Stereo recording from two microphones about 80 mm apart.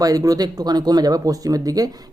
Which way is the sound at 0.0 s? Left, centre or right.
Right.